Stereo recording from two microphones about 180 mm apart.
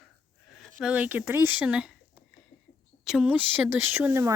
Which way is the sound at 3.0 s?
5° right (ahead or behind).